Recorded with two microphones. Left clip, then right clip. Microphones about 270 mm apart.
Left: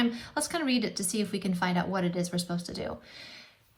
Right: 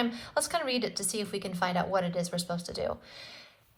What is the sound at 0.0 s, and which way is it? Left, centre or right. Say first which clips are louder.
A woman's voice: even; right.